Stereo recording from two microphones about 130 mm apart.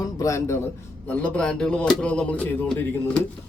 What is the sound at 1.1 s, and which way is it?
Speech, 10° left (ahead or behind).